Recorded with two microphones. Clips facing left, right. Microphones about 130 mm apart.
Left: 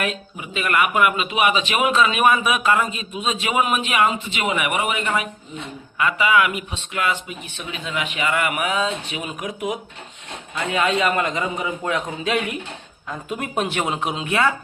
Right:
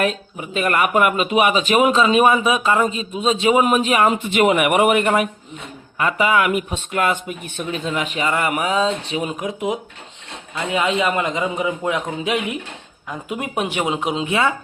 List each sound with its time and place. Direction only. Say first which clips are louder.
0.0 s speech: right 5 dB; 40° right (ahead or behind)
4.1 s a man's voice: right 8 dB; 55° right (ahead or behind); by 14.5 s 20° right (ahead or behind)